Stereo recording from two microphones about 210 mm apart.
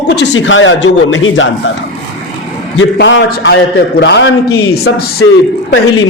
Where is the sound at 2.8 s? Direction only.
60° left (ahead or behind).